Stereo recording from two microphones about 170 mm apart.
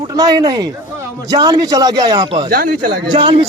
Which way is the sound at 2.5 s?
55° right (ahead or behind).